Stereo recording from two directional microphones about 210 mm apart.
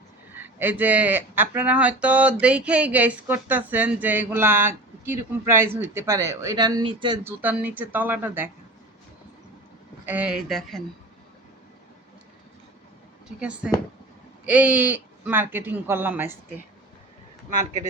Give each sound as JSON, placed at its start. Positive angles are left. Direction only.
{"t": 0.3, "sound": "speech", "side_deg": -10}
{"t": 7.3, "sound": "speech", "side_deg": -10}
{"t": 10.1, "sound": "speech", "side_deg": -5}
{"t": 13.2, "sound": "speech", "side_deg": -5}